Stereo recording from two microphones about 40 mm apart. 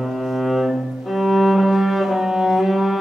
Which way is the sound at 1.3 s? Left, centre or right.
Centre.